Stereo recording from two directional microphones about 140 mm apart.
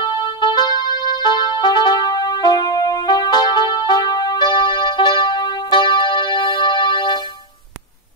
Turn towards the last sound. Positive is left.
turn(degrees=30)  # may be behind; listen again after turning